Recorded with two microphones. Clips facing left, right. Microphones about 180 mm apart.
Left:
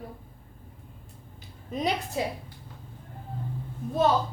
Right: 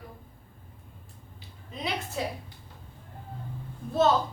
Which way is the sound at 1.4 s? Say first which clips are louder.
Left 7 dB; 45° left (ahead or behind).